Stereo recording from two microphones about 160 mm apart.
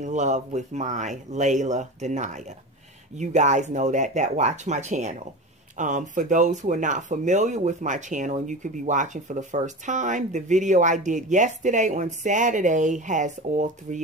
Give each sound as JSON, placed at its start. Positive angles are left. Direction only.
{"t": 0.0, "sound": "speech", "side_deg": -50}